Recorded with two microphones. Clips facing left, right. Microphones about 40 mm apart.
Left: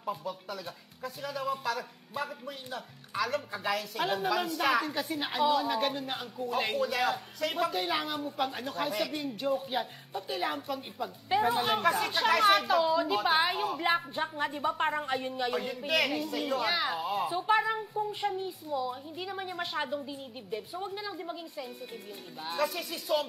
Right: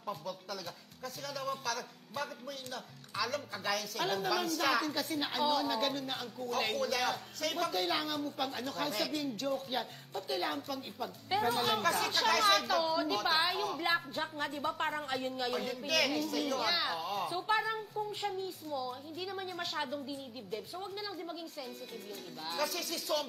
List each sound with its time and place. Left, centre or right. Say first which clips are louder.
0.0 s a woman's voice: left 4 dB; left